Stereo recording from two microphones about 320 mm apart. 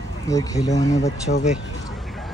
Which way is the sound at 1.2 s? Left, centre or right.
Left.